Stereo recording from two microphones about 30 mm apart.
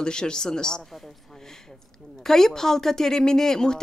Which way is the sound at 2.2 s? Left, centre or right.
Centre.